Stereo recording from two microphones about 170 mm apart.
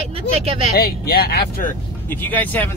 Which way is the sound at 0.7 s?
70° left (ahead or behind).